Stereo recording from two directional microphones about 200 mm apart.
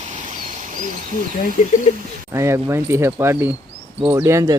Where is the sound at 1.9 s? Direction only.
30° left (ahead or behind).